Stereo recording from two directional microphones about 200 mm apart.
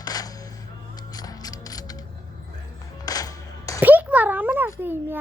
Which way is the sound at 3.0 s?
20° left (ahead or behind).